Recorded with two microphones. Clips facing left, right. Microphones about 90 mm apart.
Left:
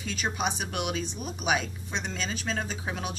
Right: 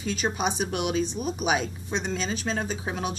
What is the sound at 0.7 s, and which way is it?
Speech, 30° right (ahead or behind).